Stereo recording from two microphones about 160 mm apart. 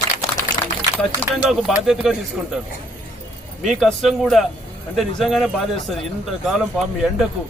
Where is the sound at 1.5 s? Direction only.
Centre (ahead or behind).